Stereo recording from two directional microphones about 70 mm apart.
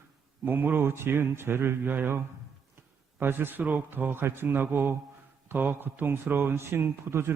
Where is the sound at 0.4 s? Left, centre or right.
Right.